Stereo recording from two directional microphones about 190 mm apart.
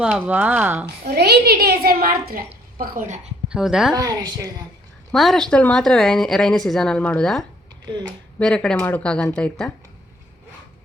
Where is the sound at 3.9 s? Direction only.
20° right (ahead or behind).